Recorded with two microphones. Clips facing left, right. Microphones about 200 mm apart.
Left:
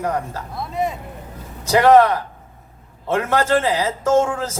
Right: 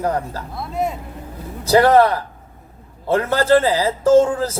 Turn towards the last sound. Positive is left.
turn(degrees=-35)  # may be behind; listen again after turning